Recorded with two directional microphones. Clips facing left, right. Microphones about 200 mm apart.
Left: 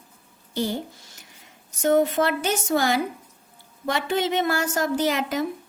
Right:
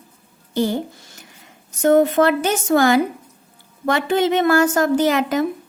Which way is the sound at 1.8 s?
55° right (ahead or behind).